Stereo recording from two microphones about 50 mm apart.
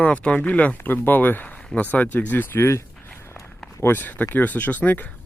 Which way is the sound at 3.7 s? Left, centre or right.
Left.